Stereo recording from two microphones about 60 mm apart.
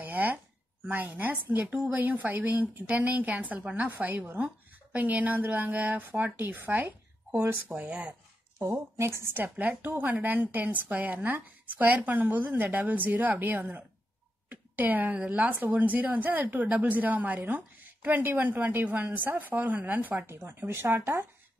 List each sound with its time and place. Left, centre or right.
0.0 s a sound: right
0.8 s a woman's voice: right
8.9 s a woman's voice: right
20.2 s speech: right